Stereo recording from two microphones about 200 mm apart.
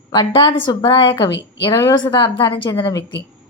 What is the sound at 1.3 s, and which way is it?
Speech, 60° left (ahead or behind).